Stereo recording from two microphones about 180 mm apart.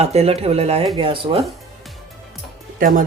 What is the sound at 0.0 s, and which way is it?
Speech, 35° right (ahead or behind).